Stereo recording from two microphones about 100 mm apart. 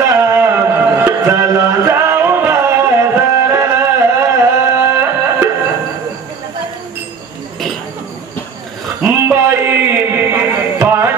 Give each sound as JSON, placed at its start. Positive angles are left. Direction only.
{"t": 0.0, "sound": "music", "side_deg": -25}
{"t": 9.0, "sound": "music", "side_deg": -25}